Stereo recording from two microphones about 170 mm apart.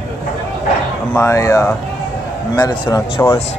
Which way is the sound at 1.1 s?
15° left (ahead or behind).